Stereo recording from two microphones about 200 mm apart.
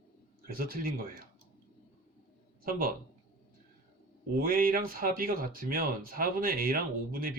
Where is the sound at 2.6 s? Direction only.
45° right (ahead or behind).